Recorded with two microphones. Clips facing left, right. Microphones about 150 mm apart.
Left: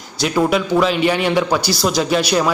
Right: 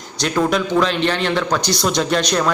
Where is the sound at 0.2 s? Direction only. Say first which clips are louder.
Left 2 dB; 5° left (ahead or behind).